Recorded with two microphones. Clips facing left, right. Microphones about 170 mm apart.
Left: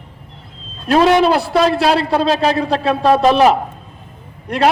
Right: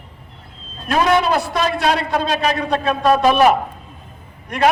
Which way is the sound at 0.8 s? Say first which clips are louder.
Left 5 dB; 30° left (ahead or behind).